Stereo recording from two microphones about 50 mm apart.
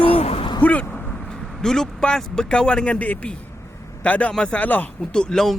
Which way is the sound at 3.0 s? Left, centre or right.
Left.